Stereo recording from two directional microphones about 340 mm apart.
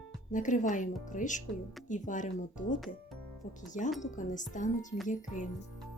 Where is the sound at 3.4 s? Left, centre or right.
Left.